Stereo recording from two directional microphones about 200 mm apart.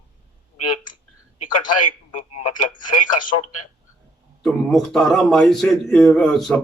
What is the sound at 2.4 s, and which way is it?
Speech, 35° left (ahead or behind).